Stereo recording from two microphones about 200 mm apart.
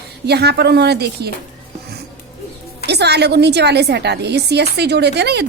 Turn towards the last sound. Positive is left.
turn(degrees=-55)  # may be behind; listen again after turning